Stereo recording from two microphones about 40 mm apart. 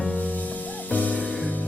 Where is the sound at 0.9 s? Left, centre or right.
Left.